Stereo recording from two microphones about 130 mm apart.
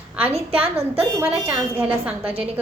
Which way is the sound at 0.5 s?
10° right (ahead or behind).